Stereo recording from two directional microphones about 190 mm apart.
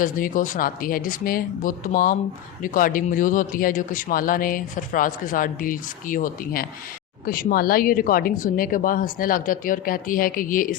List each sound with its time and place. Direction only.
0.0 s speech: 45° left (ahead or behind)